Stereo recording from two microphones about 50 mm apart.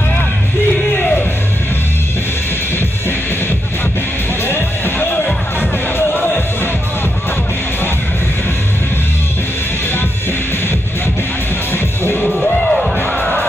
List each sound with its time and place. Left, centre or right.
0.9 s music: left
4.5 s music: left
11.7 s music: left
12.3 s music: centre
13.0 s music: left